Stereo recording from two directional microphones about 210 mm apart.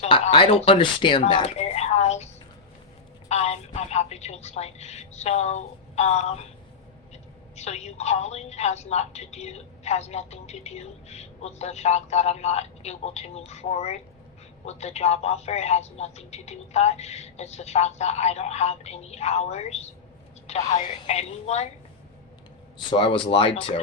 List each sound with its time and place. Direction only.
0.0 s speech: 25° left (ahead or behind)
1.3 s a sound: 25° left (ahead or behind)
3.2 s telephone: 30° left (ahead or behind)
7.5 s a woman's voice: 30° left (ahead or behind)
22.8 s speech: 25° left (ahead or behind)